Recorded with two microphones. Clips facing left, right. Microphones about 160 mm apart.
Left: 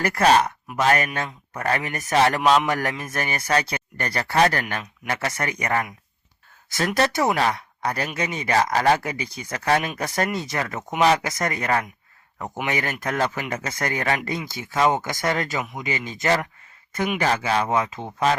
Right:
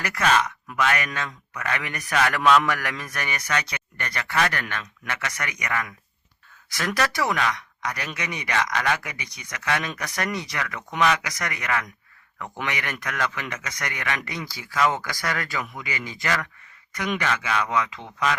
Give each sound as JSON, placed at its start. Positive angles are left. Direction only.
{"t": 0.2, "sound": "speech", "side_deg": 35}
{"t": 2.1, "sound": "speech", "side_deg": 35}
{"t": 7.3, "sound": "speech", "side_deg": 35}